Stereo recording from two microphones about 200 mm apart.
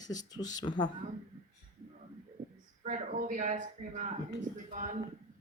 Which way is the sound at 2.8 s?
40° right (ahead or behind).